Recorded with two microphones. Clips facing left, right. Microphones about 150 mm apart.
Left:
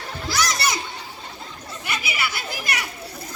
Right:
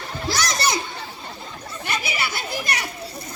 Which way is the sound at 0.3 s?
30° right (ahead or behind).